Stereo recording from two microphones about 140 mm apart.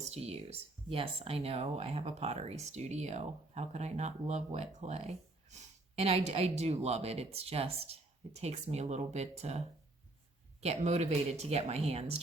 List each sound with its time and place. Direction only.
0.0 s speech: 50° right (ahead or behind)